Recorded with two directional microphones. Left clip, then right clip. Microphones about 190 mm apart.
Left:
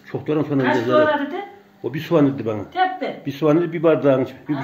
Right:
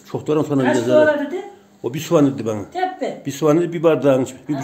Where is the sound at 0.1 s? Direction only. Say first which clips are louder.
Right 3 dB; 15° right (ahead or behind).